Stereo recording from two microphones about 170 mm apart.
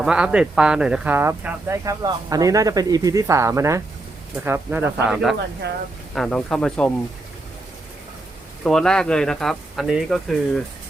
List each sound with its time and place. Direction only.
0.0 s speech: 5° right (ahead or behind)
8.6 s speech: 5° left (ahead or behind)